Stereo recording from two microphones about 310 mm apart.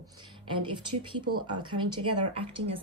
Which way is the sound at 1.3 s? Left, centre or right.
Right.